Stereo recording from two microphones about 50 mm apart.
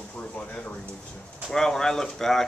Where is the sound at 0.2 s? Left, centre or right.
Left.